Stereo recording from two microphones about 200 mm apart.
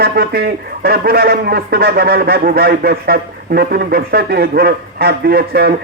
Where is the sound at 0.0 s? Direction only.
50° right (ahead or behind).